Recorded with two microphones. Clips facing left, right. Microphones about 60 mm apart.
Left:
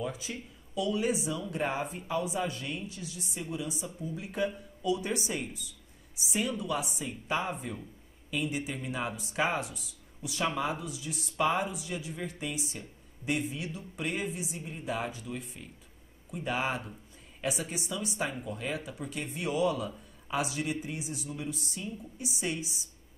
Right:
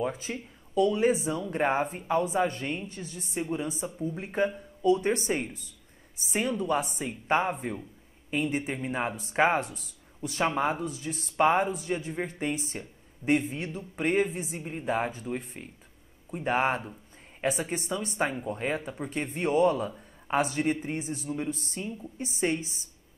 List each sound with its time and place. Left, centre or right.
0.0 s a woman's voice: right